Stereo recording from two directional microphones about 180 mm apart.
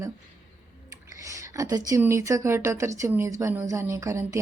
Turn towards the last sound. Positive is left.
turn(degrees=-15)  # may be behind; listen again after turning